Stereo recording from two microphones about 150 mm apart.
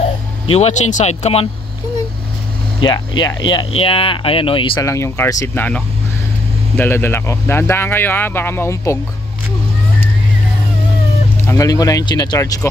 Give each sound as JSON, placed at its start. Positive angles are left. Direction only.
{"t": 0.0, "sound": "speech", "side_deg": 45}
{"t": 2.8, "sound": "speech", "side_deg": 30}
{"t": 4.8, "sound": "speech", "side_deg": 20}
{"t": 11.4, "sound": "speech", "side_deg": 20}